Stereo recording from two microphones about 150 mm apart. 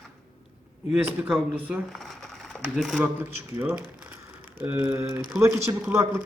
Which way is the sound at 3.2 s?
15° right (ahead or behind).